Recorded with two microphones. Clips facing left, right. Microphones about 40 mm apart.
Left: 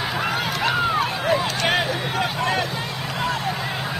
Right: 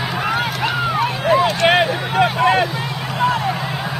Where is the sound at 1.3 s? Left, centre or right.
Right.